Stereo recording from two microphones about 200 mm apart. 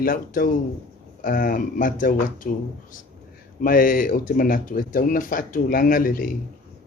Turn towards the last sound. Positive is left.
turn(degrees=45)  # may be behind; listen again after turning